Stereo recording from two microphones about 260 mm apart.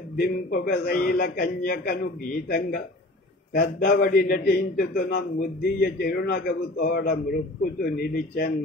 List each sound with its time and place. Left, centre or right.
0.2 s a man's voice: left